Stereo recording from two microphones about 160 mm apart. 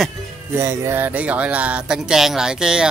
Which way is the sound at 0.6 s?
15° right (ahead or behind).